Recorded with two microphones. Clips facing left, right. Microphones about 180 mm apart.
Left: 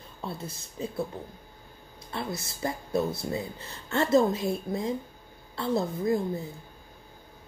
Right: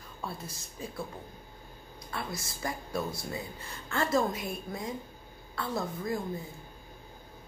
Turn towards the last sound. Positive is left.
turn(degrees=25)  # may be behind; listen again after turning